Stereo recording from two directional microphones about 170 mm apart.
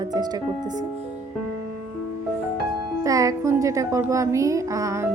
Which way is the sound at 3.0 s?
20° right (ahead or behind).